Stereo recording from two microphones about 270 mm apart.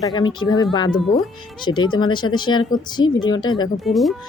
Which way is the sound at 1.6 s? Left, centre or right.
Centre.